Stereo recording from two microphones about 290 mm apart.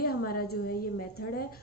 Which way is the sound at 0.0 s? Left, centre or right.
Left.